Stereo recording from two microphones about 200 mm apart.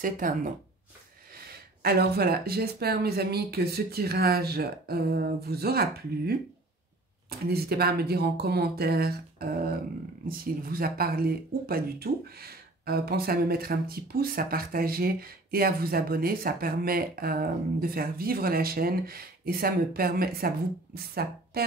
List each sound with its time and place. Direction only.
0.2 s speech: 45° right (ahead or behind)